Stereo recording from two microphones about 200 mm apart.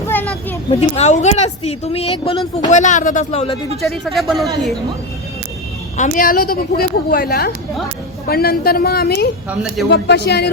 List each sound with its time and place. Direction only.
0.7 s speech: 30° left (ahead or behind)
3.8 s speech: centre (ahead or behind)
6.0 s a woman's voice: 45° left (ahead or behind)